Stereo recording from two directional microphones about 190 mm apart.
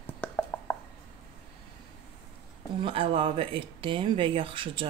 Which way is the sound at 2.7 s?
30° right (ahead or behind).